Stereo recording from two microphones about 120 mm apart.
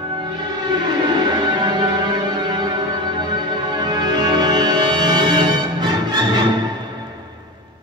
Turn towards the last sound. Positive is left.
turn(degrees=-40)  # may be behind; listen again after turning